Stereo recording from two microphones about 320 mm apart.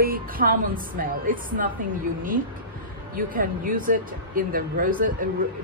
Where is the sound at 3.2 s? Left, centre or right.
Right.